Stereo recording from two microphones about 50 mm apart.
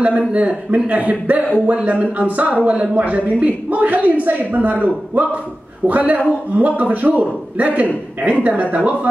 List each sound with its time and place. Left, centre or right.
0.0 s a man's voice: right